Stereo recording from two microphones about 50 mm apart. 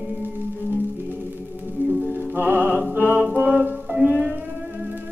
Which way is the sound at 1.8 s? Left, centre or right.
Right.